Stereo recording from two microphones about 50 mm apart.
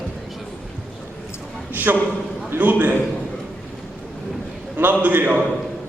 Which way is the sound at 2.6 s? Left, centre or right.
Right.